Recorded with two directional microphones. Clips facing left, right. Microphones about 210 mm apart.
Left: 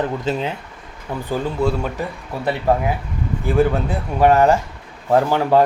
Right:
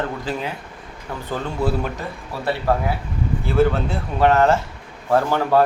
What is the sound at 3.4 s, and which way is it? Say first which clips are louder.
Speech: left 1 dB; 15° left (ahead or behind).